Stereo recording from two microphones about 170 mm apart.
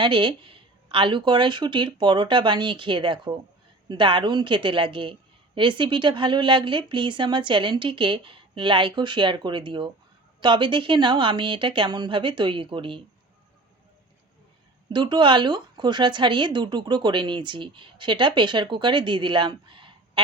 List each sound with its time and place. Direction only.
0.0 s a woman's voice: 30° right (ahead or behind)
14.8 s a woman's voice: 25° right (ahead or behind)